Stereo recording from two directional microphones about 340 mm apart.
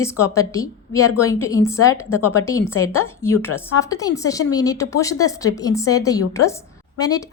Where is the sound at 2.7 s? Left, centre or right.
Left.